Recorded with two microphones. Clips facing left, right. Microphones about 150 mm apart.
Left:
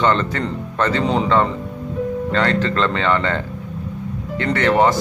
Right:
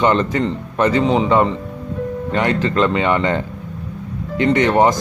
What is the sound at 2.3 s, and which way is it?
Speech, 15° right (ahead or behind).